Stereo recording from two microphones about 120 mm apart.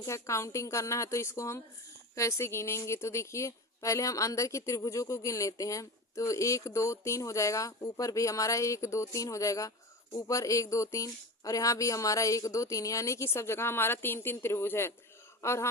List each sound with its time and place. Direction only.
0.0 s a woman's voice: 25° left (ahead or behind)